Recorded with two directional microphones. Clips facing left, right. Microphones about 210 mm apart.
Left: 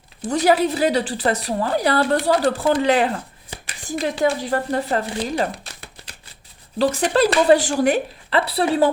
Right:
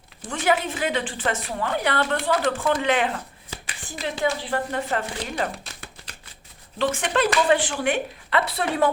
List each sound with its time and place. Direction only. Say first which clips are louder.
0.2 s speech: left 6 dB; 35° left (ahead or behind)